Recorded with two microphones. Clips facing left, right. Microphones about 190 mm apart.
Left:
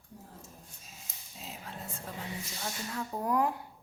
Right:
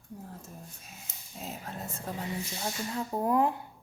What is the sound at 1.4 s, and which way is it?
Dog, 45° right (ahead or behind).